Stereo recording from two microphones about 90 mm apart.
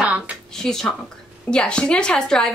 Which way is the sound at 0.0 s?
15° right (ahead or behind).